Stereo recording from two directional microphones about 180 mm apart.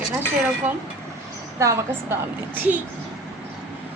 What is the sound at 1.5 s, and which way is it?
Speech, 15° right (ahead or behind).